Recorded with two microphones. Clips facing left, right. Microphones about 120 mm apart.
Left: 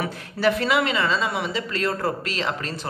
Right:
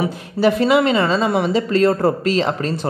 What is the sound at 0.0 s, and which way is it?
A woman's voice, 20° right (ahead or behind).